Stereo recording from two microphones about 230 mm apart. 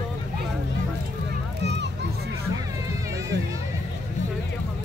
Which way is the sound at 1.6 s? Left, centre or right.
Right.